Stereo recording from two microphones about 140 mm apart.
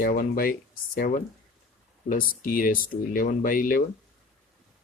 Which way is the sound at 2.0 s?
80° left.